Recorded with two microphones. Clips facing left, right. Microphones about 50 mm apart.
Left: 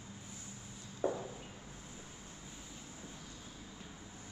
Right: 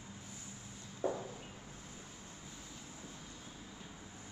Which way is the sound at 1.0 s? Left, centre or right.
Left.